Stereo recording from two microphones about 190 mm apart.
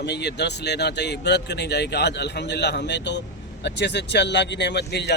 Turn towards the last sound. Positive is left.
turn(degrees=65)  # may be behind; listen again after turning